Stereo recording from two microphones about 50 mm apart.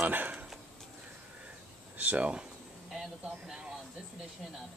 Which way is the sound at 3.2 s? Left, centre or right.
Centre.